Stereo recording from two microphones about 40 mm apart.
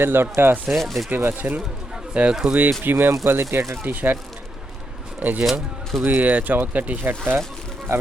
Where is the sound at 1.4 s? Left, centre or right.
Right.